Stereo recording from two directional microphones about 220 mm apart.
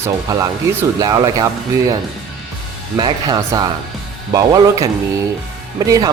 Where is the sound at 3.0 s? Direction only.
20° right (ahead or behind).